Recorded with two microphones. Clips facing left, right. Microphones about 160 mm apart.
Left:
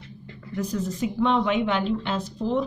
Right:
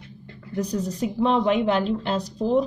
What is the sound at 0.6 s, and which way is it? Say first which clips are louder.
A woman's voice: right 1 dB; 40° right (ahead or behind).